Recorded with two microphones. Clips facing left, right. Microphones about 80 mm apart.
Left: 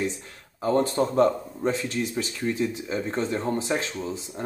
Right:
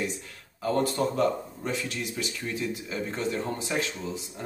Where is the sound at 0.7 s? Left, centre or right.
Left.